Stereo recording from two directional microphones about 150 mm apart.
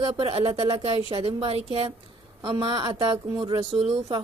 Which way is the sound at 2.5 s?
25° right (ahead or behind).